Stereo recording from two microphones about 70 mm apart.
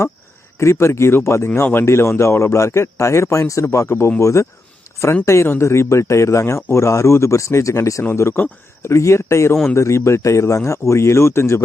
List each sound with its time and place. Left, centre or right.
0.6 s speech: left
1.5 s speech: left